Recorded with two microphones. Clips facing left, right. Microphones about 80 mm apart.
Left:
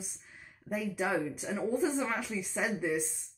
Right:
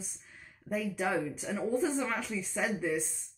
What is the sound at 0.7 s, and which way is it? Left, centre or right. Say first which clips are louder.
Speech: even; centre.